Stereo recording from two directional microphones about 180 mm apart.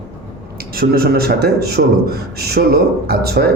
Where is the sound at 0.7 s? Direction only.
55° right (ahead or behind).